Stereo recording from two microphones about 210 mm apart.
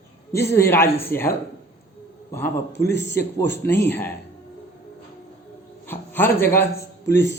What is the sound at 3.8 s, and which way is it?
Speech, 10° left (ahead or behind).